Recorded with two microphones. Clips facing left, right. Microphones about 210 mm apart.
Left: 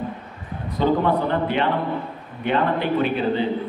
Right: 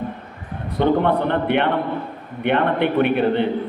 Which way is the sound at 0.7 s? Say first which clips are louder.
Right 2 dB; 65° right (ahead or behind).